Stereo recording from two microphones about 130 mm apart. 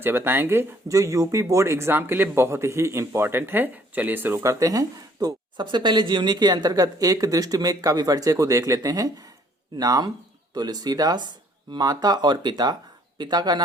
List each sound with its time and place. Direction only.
0.0 s speech: 15° right (ahead or behind); by 13.6 s 30° right (ahead or behind)